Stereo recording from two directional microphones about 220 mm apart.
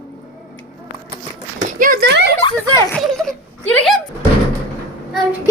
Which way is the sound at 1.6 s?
40° right (ahead or behind).